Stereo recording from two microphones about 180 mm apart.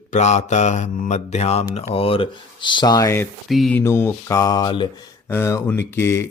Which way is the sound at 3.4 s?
Centre (ahead or behind).